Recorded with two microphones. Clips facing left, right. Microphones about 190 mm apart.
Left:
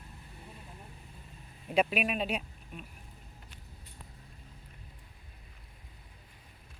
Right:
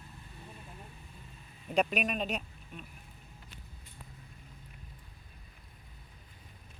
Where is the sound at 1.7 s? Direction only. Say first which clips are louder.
Left 1 dB; 5° left (ahead or behind).